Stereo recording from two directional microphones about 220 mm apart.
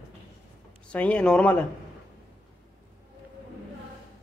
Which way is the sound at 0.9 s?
5° left (ahead or behind).